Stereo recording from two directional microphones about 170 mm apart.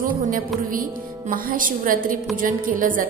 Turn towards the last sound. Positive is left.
turn(degrees=-50)  # may be behind; listen again after turning